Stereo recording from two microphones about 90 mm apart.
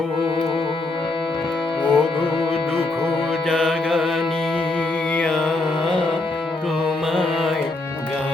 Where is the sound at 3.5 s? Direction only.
5° left (ahead or behind).